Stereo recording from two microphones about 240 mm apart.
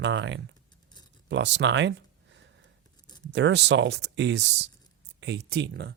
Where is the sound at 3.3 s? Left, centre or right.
Right.